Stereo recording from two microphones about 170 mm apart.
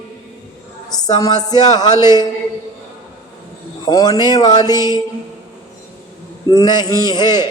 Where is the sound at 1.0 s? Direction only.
20° left (ahead or behind).